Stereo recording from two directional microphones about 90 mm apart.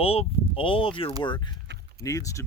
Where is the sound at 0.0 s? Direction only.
90° left.